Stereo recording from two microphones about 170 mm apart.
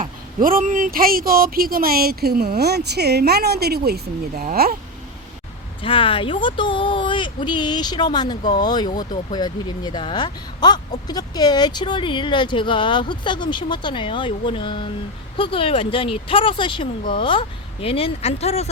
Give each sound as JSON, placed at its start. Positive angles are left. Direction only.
{"t": 0.4, "sound": "speech", "side_deg": -55}
{"t": 5.8, "sound": "speech", "side_deg": 30}